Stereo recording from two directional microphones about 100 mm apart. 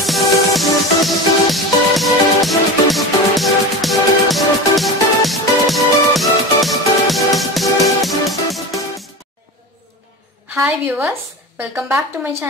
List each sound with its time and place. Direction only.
0.0 s music: centre (ahead or behind)
10.5 s speech: 15° right (ahead or behind)